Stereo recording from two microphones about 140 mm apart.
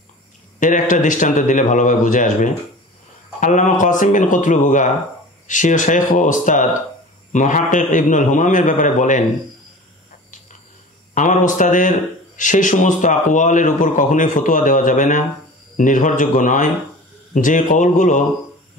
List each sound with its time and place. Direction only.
0.6 s a man's voice: 65° left (ahead or behind)
11.1 s a man's voice: 65° left (ahead or behind)